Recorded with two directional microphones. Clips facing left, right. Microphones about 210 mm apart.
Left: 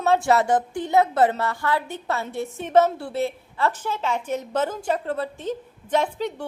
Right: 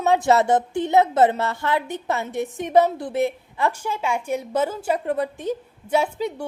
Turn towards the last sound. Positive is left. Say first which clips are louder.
# right 1 dB
turn(degrees=-10)  # may be behind; listen again after turning